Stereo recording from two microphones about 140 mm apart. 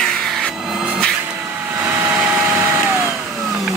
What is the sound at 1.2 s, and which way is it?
Vacuum cleaner, 15° right (ahead or behind).